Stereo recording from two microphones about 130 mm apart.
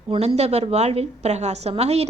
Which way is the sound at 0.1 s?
55° right (ahead or behind).